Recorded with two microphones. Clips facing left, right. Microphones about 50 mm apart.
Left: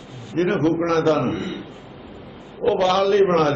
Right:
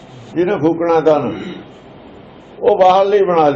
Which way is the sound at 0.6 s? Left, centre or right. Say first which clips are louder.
Right 5 dB; right.